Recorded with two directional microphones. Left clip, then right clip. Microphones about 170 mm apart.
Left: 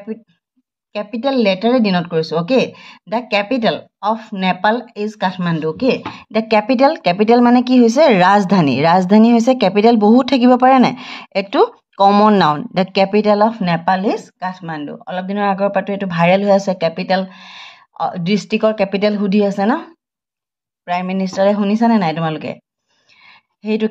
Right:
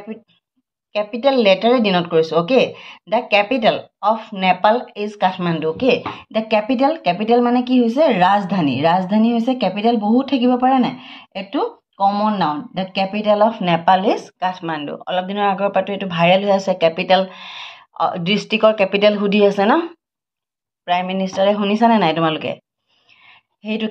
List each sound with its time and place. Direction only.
0.9 s speech: 30° left (ahead or behind)
20.8 s speech: 30° left (ahead or behind)
23.0 s a sound: 35° left (ahead or behind)